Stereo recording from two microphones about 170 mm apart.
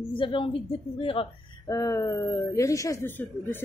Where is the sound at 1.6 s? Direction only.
20° left (ahead or behind).